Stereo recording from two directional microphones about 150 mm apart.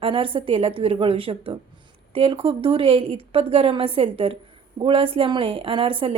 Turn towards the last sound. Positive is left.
turn(degrees=-35)  # may be behind; listen again after turning